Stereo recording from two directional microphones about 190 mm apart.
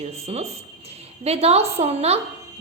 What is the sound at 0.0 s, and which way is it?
A woman's voice, 35° right (ahead or behind).